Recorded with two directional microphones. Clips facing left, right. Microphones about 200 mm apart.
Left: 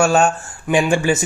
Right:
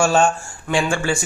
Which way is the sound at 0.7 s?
20° left (ahead or behind).